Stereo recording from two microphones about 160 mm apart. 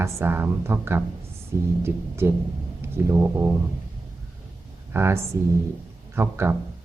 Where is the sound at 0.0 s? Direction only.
15° right (ahead or behind).